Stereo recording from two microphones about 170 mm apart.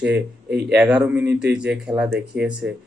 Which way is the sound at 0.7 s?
10° right (ahead or behind).